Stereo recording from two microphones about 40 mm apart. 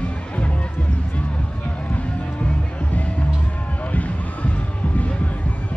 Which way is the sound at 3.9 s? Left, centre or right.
Left.